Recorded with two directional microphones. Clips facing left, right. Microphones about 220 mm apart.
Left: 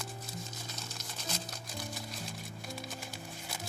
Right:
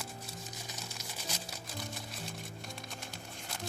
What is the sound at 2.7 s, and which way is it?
Music, 5° left (ahead or behind).